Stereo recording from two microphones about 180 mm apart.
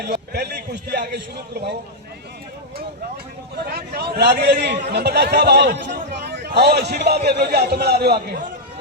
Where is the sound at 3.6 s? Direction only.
60° right (ahead or behind).